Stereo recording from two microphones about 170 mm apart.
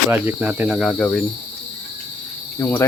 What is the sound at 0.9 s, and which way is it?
Speech, 5° left (ahead or behind).